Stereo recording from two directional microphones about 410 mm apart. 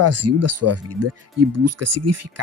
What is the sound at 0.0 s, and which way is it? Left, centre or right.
Speech, right.